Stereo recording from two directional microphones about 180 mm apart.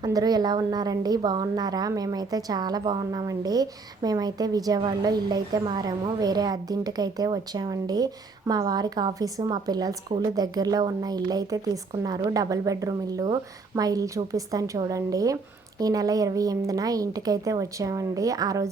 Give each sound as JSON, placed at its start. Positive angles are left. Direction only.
{"t": 0.0, "sound": "a woman's voice", "side_deg": -20}